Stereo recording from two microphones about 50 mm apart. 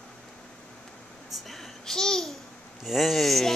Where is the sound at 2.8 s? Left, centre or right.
Centre.